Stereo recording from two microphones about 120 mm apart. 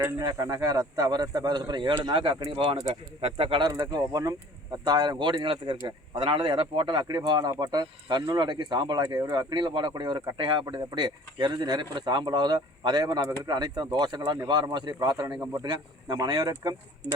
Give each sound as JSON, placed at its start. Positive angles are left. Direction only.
{"t": 0.0, "sound": "speech", "side_deg": -30}
{"t": 2.9, "sound": "speech", "side_deg": -55}
{"t": 3.6, "sound": "speech", "side_deg": -35}